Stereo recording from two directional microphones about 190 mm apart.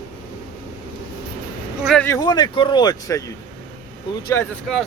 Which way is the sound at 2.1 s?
20° left (ahead or behind).